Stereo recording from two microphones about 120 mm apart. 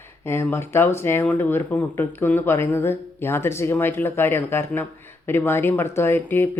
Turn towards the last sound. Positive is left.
turn(degrees=20)  # may be behind; listen again after turning